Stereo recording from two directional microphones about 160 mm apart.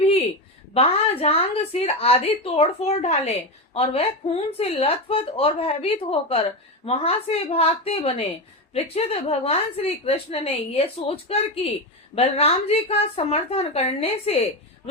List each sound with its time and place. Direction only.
0.7 s a woman's voice: 40° left (ahead or behind)